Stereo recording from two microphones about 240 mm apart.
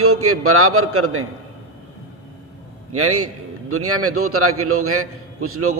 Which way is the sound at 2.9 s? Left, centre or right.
Right.